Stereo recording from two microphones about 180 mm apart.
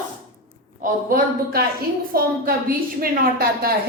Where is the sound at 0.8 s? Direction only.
50° right (ahead or behind).